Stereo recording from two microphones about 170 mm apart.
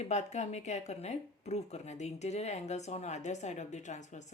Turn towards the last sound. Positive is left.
turn(degrees=45)  # may be behind; listen again after turning